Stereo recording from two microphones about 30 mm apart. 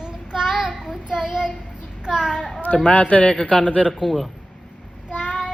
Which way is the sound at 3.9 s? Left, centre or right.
Centre.